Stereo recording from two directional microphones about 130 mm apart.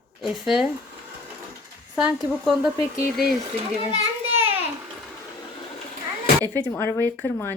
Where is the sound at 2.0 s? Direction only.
5° right (ahead or behind).